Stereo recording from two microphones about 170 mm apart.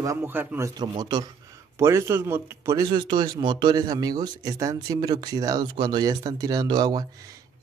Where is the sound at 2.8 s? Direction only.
30° right (ahead or behind).